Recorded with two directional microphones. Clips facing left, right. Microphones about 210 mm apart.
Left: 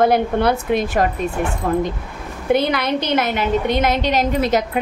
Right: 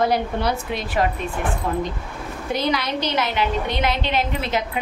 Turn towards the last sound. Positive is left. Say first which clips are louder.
# left 7 dB
turn(degrees=40)  # may be behind; listen again after turning